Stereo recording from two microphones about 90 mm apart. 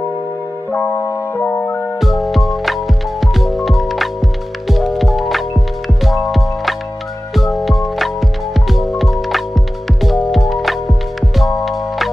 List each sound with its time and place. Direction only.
1.4 s music: 25° left (ahead or behind)
2.0 s music: centre (ahead or behind)